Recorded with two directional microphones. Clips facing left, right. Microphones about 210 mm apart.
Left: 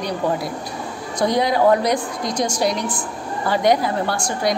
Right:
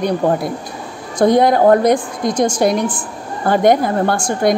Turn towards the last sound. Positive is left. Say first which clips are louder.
# right 6 dB
turn(degrees=-50)  # may be behind; listen again after turning